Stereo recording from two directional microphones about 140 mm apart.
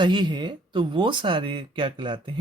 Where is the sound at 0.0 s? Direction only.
30° right (ahead or behind).